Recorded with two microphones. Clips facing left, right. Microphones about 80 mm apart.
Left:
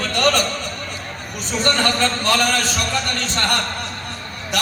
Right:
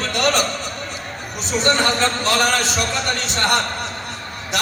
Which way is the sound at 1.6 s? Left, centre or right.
Centre.